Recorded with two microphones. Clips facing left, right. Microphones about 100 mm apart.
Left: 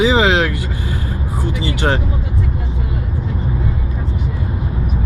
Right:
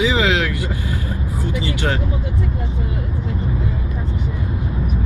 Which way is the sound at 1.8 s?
30° left (ahead or behind).